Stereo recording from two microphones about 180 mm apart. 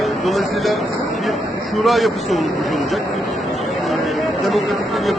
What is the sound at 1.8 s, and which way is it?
Speech, centre (ahead or behind).